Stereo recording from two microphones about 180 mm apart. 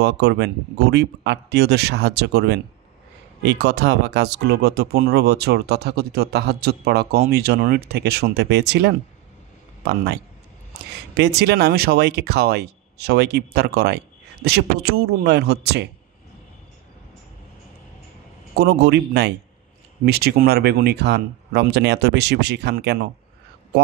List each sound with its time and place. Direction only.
0.0 s speech: 70° right (ahead or behind)
18.6 s speech: 65° right (ahead or behind)